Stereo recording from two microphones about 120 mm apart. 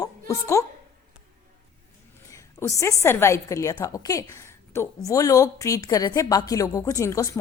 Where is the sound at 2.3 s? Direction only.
25° left (ahead or behind).